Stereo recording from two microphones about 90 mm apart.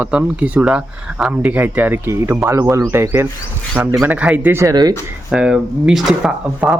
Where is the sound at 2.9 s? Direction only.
30° right (ahead or behind).